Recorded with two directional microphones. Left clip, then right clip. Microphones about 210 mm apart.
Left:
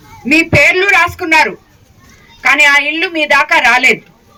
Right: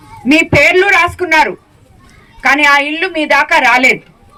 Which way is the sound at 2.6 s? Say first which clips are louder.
Left 2 dB; 45° right (ahead or behind).